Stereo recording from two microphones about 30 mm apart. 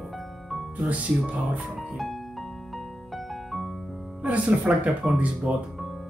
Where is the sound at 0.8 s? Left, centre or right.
Right.